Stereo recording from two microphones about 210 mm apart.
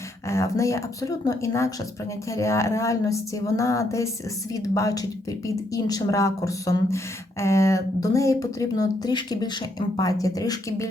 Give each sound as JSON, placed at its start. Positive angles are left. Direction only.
{"t": 0.3, "sound": "speech", "side_deg": 15}